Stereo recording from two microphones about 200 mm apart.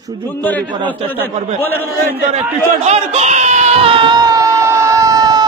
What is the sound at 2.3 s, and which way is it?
Baby cry, 35° right (ahead or behind).